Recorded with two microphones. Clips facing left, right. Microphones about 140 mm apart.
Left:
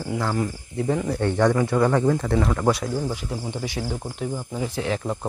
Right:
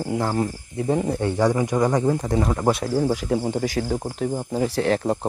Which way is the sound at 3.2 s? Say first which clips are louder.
Right 8 dB; 55° right (ahead or behind).